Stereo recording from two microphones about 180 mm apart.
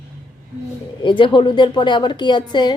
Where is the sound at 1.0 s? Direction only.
25° left (ahead or behind).